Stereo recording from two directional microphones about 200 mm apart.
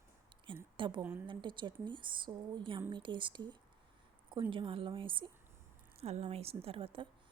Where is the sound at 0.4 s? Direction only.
25° right (ahead or behind).